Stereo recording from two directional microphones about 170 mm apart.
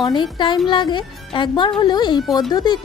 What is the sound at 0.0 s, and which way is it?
A woman's voice, 25° left (ahead or behind).